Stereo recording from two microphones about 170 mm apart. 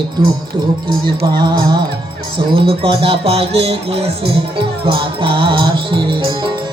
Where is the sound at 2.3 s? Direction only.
30° right (ahead or behind).